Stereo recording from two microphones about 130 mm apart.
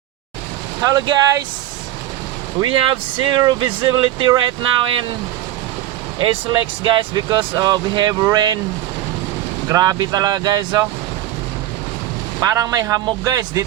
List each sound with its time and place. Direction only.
0.8 s speech: 30° right (ahead or behind)
2.6 s speech: 40° right (ahead or behind)
6.1 s speech: 40° right (ahead or behind)
9.6 s speech: 25° right (ahead or behind)
12.4 s speech: 30° right (ahead or behind)